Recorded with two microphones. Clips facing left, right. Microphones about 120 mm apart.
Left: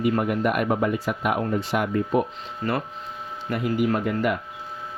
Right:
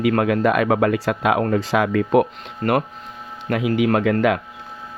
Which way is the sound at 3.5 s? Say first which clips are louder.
Right 5 dB; 90° right.